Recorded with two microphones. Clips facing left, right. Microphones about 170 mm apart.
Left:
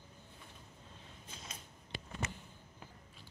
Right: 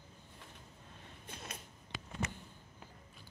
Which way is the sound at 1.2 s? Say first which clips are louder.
Right 4 dB; 60° right (ahead or behind).